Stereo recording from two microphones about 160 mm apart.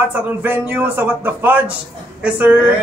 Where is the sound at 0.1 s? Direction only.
10° right (ahead or behind).